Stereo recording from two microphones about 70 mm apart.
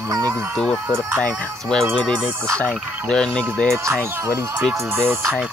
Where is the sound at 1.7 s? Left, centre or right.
Centre.